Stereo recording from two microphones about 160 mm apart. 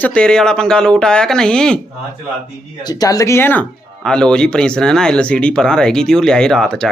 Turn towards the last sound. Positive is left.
turn(degrees=5)  # may be behind; listen again after turning